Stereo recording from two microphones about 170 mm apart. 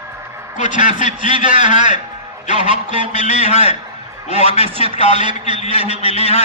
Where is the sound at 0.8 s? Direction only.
45° left (ahead or behind).